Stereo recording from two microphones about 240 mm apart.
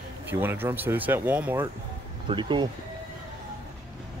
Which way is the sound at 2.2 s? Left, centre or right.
Centre.